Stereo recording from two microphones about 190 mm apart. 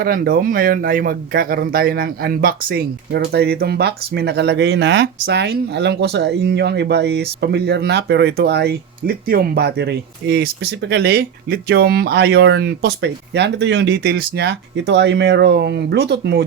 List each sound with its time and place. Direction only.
0.0 s speech: 50° right (ahead or behind)